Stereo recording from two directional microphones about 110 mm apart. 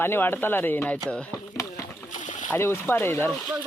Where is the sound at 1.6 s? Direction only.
30° left (ahead or behind).